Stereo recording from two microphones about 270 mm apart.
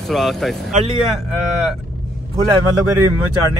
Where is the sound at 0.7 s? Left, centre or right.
Right.